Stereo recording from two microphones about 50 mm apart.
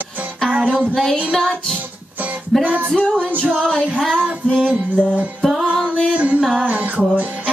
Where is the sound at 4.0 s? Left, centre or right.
Centre.